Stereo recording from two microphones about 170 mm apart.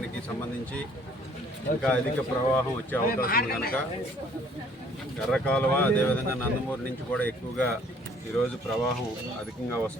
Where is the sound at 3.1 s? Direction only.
60° left (ahead or behind).